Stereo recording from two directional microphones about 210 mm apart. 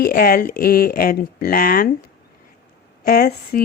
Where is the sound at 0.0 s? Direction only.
45° left (ahead or behind).